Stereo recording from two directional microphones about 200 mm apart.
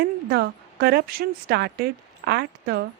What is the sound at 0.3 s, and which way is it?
A woman's voice, 55° right (ahead or behind).